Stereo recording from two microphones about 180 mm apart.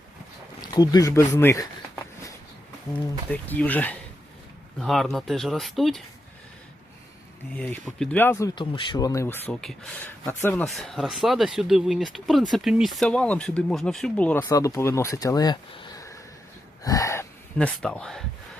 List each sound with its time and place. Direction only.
0.6 s speech: 20° left (ahead or behind)
3.2 s speech: 10° left (ahead or behind)
7.5 s speech: 10° left (ahead or behind)
9.5 s speech: centre (ahead or behind)
10.7 s speech: centre (ahead or behind); by 16.1 s 25° left (ahead or behind)
16.8 s gasp: 20° left (ahead or behind)
17.6 s speech: 5° left (ahead or behind)